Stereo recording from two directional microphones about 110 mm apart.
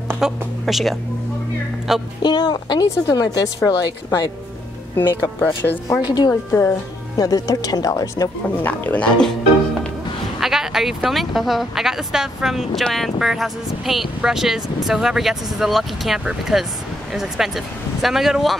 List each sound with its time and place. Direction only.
0.2 s speech: centre (ahead or behind)
2.2 s speech: 40° left (ahead or behind)
4.9 s speech: 20° left (ahead or behind)
5.9 s speech: 35° left (ahead or behind)
6.5 s speech: 25° left (ahead or behind)
8.6 s speech: 15° left (ahead or behind)
10.4 s speech: 5° right (ahead or behind)